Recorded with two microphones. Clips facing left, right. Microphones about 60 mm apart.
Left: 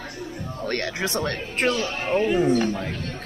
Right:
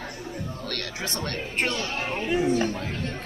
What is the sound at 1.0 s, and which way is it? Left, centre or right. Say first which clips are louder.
Speech: left 4 dB; left.